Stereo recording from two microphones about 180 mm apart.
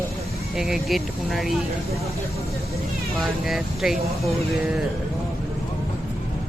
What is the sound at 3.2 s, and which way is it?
Speech, centre (ahead or behind).